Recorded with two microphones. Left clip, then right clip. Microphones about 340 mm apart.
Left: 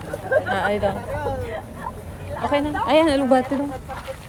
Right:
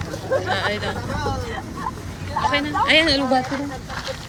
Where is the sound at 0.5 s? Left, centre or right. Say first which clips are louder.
Left 2 dB; centre.